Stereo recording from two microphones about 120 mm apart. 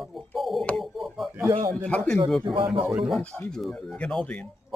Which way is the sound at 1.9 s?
10° left (ahead or behind).